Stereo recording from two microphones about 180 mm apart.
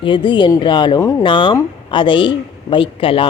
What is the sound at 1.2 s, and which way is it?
A woman's voice, 25° left (ahead or behind).